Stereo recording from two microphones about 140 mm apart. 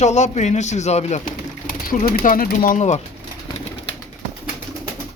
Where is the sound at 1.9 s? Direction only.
90° left.